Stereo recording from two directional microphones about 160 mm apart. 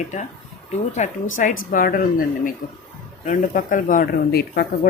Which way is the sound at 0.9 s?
50° left (ahead or behind).